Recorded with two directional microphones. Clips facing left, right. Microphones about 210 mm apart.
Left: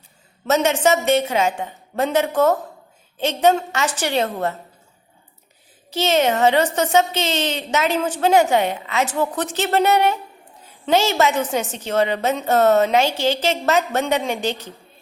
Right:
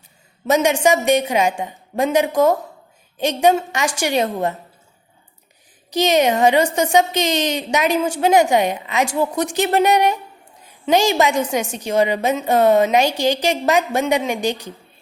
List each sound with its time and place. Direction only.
0.4 s a woman's voice: 15° right (ahead or behind)
5.9 s a woman's voice: 15° right (ahead or behind)